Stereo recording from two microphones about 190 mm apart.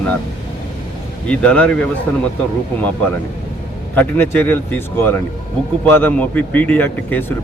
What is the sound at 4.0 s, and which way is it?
Speech, 10° left (ahead or behind).